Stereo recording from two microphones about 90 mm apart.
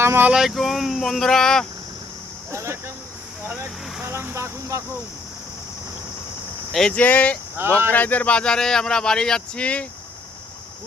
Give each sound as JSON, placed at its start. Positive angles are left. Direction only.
{"t": 0.0, "sound": "speech", "side_deg": -30}
{"t": 0.3, "sound": "speech", "side_deg": -5}
{"t": 2.5, "sound": "speech", "side_deg": -30}
{"t": 4.0, "sound": "speech", "side_deg": -25}
{"t": 6.7, "sound": "speech", "side_deg": 5}
{"t": 6.9, "sound": "speech", "side_deg": 15}
{"t": 7.5, "sound": "speech", "side_deg": -25}
{"t": 7.9, "sound": "speech", "side_deg": 20}